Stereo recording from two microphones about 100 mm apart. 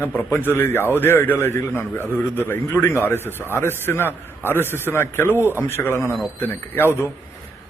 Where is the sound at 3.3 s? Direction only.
20° right (ahead or behind).